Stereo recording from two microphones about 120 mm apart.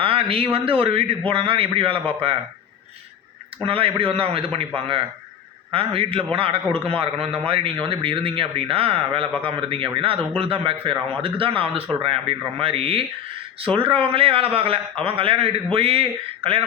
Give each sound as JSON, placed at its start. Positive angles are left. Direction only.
{"t": 0.0, "sound": "speech", "side_deg": -50}
{"t": 3.7, "sound": "speech", "side_deg": -50}
{"t": 5.7, "sound": "speech", "side_deg": -50}